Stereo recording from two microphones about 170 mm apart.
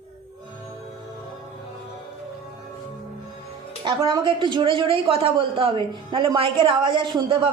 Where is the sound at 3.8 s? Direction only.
25° right (ahead or behind).